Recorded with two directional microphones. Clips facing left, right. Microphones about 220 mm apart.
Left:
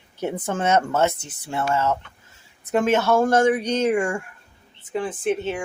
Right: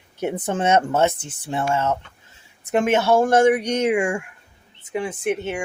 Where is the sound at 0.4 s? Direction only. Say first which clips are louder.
Right 2 dB; 20° right (ahead or behind).